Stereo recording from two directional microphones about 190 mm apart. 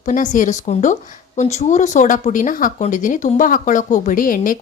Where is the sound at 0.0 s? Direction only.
40° left (ahead or behind).